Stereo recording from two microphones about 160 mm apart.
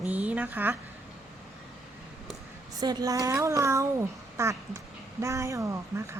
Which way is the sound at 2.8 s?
25° right (ahead or behind).